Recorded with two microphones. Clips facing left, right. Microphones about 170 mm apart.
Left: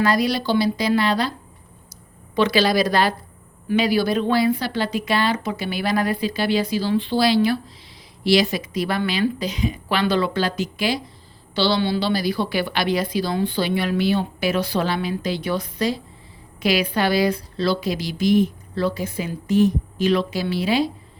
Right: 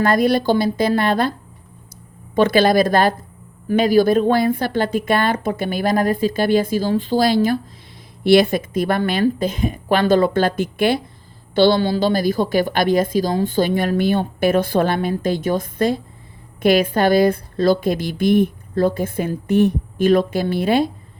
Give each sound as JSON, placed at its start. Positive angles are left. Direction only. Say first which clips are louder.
{"t": 0.0, "sound": "a woman's voice", "louder": "right 4 dB", "side_deg": -50}
{"t": 2.3, "sound": "a woman's voice", "louder": "right 4 dB", "side_deg": -50}